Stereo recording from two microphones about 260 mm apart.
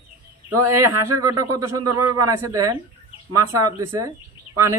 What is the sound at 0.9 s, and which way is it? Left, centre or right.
Speech, right.